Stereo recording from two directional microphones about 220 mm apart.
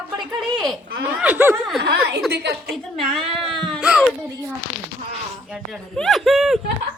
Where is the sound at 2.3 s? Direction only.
45° right (ahead or behind).